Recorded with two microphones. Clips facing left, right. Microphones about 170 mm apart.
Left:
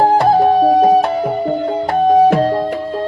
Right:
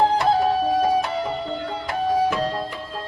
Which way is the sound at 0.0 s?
50° left (ahead or behind).